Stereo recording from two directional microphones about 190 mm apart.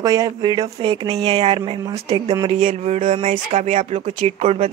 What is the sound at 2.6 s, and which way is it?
Speech, 40° right (ahead or behind).